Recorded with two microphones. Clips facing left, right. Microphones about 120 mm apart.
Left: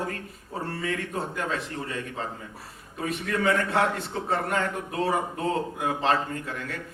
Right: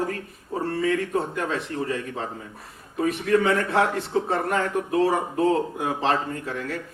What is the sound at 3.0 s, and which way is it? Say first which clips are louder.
A man's voice: right 7 dB; 30° right (ahead or behind).